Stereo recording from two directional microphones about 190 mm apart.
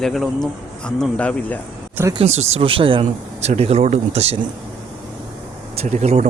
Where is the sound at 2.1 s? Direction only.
30° right (ahead or behind).